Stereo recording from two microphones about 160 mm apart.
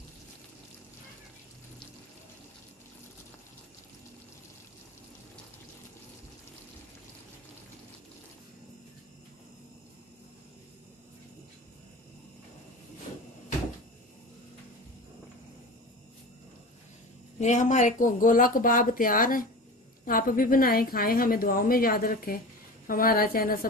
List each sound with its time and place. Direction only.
17.4 s a woman's voice: 50° left (ahead or behind); by 23.7 s 65° left (ahead or behind)